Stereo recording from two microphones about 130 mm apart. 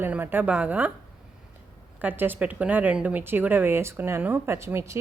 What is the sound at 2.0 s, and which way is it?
Speech, 15° right (ahead or behind).